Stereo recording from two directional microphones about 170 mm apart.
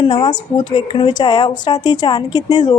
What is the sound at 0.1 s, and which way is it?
Speech, 25° left (ahead or behind).